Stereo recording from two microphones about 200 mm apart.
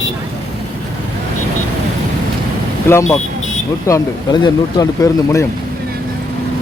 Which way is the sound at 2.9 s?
15° left (ahead or behind).